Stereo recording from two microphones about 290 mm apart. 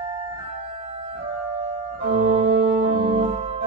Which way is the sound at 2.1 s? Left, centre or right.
Right.